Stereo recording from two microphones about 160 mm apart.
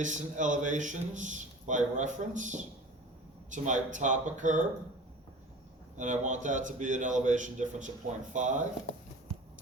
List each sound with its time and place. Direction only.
0.0 s a man's voice: 50° right (ahead or behind)
6.0 s a man's voice: 50° right (ahead or behind)